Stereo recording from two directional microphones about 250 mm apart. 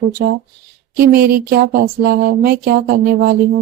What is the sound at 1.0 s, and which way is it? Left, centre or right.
Speech, right.